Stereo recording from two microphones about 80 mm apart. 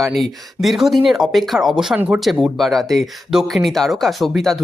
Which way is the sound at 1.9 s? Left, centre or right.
Right.